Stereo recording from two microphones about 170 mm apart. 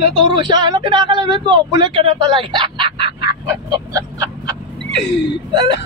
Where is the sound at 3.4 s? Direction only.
20° right (ahead or behind).